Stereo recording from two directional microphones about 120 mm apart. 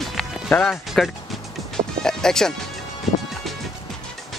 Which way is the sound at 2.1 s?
5° left (ahead or behind).